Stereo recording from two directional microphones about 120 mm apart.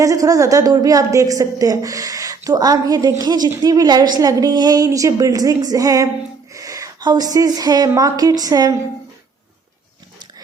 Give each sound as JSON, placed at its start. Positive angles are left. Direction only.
{"t": 0.0, "sound": "a woman's voice", "side_deg": -30}